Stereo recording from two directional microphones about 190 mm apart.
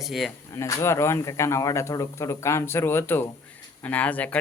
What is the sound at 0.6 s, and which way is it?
Speech, 15° left (ahead or behind).